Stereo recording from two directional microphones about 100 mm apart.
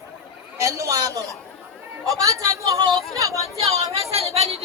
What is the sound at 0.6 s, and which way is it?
Speech, 35° right (ahead or behind).